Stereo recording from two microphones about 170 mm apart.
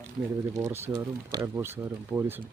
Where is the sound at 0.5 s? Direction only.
15° right (ahead or behind).